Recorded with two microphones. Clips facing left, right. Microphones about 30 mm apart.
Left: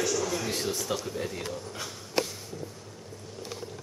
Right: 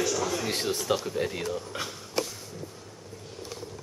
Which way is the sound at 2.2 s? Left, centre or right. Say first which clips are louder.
Left 1 dB; centre.